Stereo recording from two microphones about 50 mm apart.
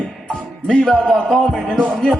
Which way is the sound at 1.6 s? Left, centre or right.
Centre.